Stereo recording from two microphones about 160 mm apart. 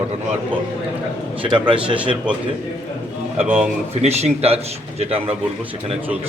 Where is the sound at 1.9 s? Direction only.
5° right (ahead or behind).